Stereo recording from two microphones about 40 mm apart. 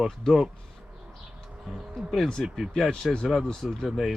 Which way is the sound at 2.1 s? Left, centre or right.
Centre.